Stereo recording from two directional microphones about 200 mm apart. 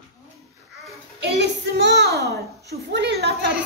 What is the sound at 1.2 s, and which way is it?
A child's voice, 55° right (ahead or behind).